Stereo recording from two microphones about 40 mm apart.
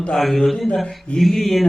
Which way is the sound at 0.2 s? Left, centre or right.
Centre.